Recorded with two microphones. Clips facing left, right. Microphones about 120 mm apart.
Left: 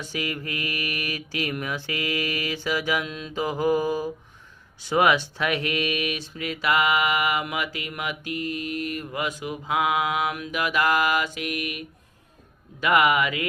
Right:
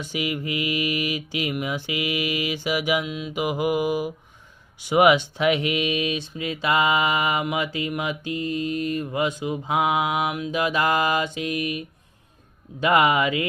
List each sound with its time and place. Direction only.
0.0 s mantra: 15° right (ahead or behind)
4.8 s speech: 15° right (ahead or behind)